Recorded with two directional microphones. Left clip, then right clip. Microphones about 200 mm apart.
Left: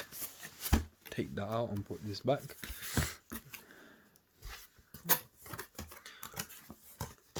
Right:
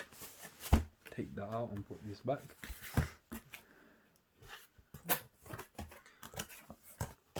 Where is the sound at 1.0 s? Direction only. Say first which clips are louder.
Left 5 dB; 45° left (ahead or behind).